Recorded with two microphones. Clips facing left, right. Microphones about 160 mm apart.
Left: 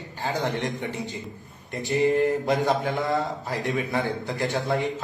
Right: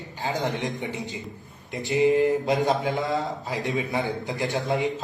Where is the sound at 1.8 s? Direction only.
20° right (ahead or behind).